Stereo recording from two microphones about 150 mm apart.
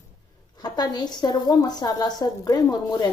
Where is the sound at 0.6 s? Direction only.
25° left (ahead or behind).